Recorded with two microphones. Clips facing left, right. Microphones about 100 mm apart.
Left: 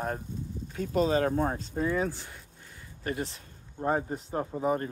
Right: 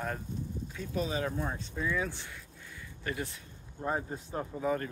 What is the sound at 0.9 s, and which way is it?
Speech, 55° left (ahead or behind).